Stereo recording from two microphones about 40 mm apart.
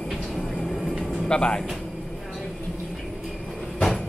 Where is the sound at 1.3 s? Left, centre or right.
Left.